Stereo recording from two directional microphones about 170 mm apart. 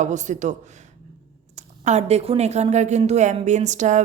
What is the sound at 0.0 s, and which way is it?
Speech, 45° right (ahead or behind).